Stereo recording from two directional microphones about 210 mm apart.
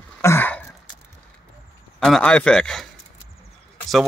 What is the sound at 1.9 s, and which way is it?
Speech, centre (ahead or behind).